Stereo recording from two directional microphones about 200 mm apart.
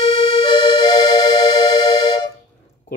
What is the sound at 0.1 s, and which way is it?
Music, 25° left (ahead or behind).